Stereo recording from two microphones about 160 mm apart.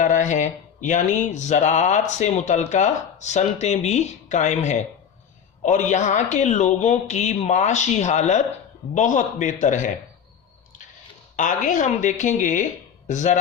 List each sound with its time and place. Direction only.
0.0 s speech: 50° left (ahead or behind)
11.3 s speech: 55° left (ahead or behind)